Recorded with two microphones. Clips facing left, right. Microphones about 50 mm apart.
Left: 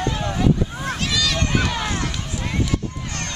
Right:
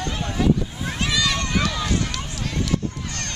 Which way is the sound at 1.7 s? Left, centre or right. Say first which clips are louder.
Even; left.